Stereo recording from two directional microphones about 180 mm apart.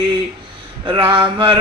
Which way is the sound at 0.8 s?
25° right (ahead or behind).